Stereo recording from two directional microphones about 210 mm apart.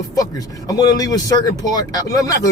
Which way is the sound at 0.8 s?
20° left (ahead or behind).